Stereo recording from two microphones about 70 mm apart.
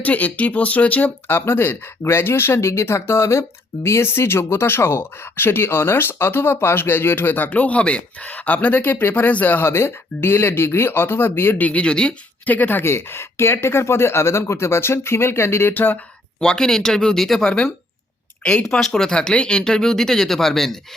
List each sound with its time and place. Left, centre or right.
0.0 s speech: left
16.4 s speech: centre
18.7 s speech: centre